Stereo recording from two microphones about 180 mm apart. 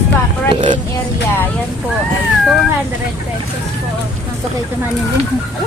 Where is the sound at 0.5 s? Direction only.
30° right (ahead or behind).